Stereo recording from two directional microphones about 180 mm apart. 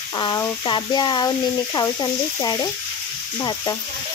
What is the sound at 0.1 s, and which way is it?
Speech, 25° left (ahead or behind).